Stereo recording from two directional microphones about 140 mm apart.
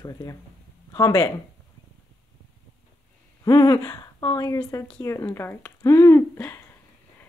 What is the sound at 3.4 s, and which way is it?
A woman's voice, 25° left (ahead or behind).